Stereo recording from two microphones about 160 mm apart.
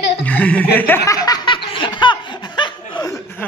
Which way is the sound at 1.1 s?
25° left (ahead or behind).